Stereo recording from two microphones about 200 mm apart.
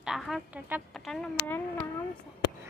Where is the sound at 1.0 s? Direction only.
5° left (ahead or behind).